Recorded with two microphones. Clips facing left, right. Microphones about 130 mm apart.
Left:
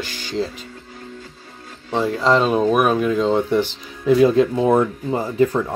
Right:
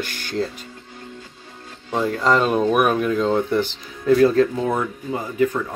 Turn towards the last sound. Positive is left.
turn(degrees=35)  # may be behind; listen again after turning